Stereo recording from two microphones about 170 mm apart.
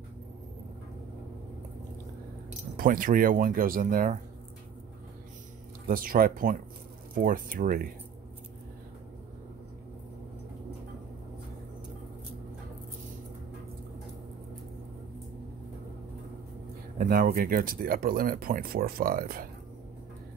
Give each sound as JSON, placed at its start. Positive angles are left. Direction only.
{"t": 2.8, "sound": "speech", "side_deg": -55}
{"t": 5.9, "sound": "speech", "side_deg": -55}
{"t": 17.0, "sound": "speech", "side_deg": -60}